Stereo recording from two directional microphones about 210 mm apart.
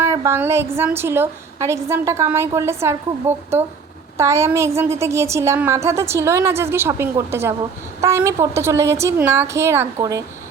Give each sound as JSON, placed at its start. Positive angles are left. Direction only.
{"t": 0.0, "sound": "a woman's voice", "side_deg": -15}